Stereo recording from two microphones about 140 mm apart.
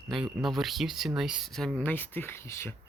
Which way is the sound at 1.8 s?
15° left (ahead or behind).